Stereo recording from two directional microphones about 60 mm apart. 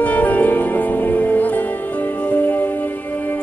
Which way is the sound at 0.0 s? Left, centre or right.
Left.